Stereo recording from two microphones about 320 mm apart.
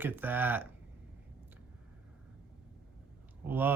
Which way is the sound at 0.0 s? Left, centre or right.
Centre.